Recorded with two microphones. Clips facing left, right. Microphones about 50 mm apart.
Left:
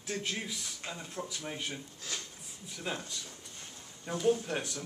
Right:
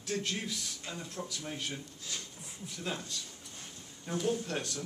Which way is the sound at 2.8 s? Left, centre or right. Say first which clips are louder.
Left 1 dB; centre.